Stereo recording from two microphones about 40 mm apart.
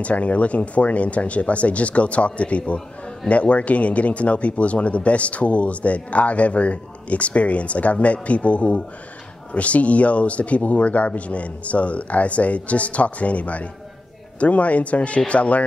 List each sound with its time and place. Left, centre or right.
0.0 s speech: left